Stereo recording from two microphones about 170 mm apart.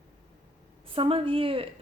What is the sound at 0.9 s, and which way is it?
Speech, 35° right (ahead or behind).